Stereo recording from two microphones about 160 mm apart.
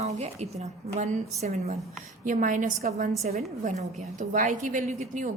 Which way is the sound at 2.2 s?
55° right (ahead or behind).